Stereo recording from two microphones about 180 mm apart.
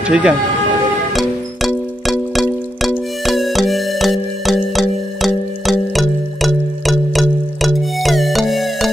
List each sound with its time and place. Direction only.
0.0 s speech: 5° right (ahead or behind)
1.1 s music: centre (ahead or behind)